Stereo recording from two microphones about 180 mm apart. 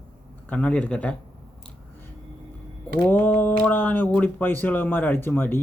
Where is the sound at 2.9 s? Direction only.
10° left (ahead or behind).